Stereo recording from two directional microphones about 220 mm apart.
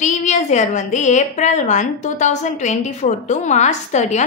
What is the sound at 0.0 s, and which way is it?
A woman's voice, 35° left (ahead or behind).